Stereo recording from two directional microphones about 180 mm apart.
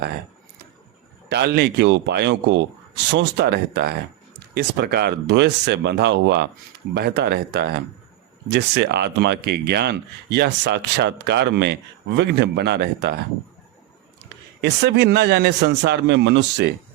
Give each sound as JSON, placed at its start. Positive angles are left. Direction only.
{"t": 1.3, "sound": "speech", "side_deg": -65}
{"t": 14.6, "sound": "speech", "side_deg": -65}